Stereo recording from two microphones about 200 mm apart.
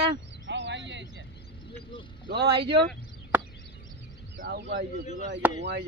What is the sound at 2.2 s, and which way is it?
Speech, 55° right (ahead or behind).